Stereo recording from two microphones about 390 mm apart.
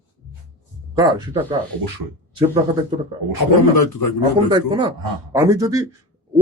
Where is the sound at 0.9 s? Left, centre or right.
Centre.